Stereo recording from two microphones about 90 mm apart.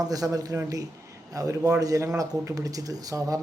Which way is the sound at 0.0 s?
40° right (ahead or behind).